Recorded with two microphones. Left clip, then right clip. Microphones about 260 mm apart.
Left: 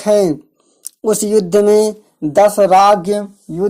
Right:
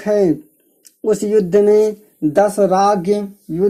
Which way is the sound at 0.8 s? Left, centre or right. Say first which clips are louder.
Left 1 dB; left.